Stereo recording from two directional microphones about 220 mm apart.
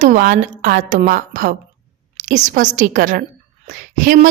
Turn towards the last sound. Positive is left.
turn(degrees=-35)  # may be behind; listen again after turning